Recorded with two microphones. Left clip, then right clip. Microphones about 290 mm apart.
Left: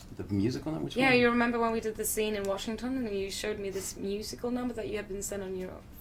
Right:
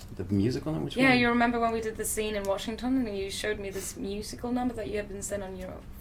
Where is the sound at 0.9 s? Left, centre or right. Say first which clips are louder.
Right 1 dB; left.